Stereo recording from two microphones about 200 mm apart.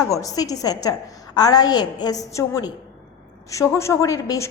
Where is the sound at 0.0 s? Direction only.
15° left (ahead or behind).